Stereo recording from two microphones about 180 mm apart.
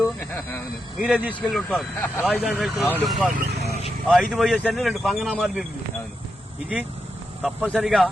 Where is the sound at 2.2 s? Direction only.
5° right (ahead or behind).